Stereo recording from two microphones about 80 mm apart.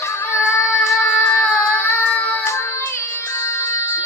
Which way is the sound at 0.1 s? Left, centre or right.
Left.